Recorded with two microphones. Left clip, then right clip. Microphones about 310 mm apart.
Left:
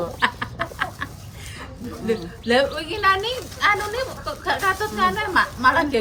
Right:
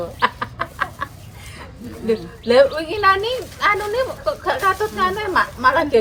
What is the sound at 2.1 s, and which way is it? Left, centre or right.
Speech, centre.